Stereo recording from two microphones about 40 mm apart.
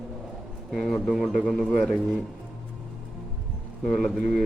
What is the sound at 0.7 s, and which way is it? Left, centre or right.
Speech, centre.